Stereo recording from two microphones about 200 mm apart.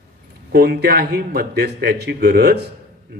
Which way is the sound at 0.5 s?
55° right (ahead or behind).